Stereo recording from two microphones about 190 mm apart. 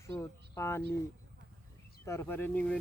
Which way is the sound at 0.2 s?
15° left (ahead or behind).